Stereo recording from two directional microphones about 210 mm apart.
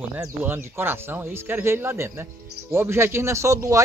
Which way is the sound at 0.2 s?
10° right (ahead or behind).